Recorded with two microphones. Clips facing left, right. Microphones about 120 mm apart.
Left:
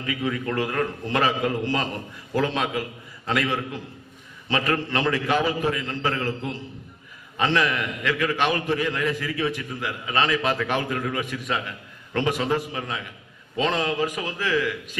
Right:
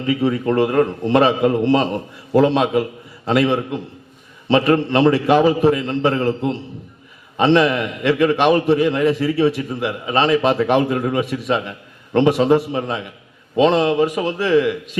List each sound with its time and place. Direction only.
0.0 s a man's voice: 30° right (ahead or behind)